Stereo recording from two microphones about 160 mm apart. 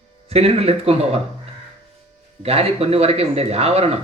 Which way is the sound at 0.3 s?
40° right (ahead or behind).